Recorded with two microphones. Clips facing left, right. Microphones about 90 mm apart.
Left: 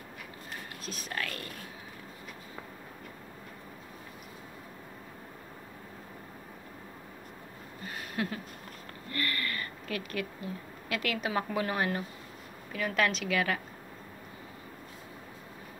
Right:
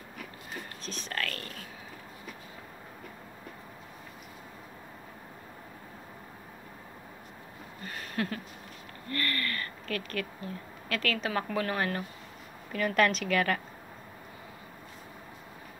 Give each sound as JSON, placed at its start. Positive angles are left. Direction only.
{"t": 0.8, "sound": "a sound", "side_deg": 5}
{"t": 8.2, "sound": "speech", "side_deg": 15}
{"t": 12.7, "sound": "a woman's voice", "side_deg": 0}